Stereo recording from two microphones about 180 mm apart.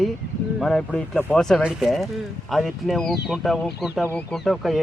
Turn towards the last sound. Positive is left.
turn(degrees=0)  # may be behind; listen again after turning